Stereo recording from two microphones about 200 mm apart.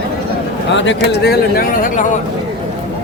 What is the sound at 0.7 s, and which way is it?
Speech, 65° left (ahead or behind).